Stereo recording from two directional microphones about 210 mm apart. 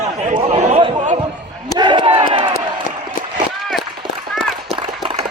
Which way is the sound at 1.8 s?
20° right (ahead or behind).